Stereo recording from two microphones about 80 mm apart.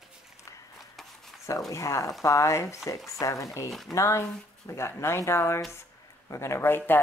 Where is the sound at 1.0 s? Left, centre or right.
Centre.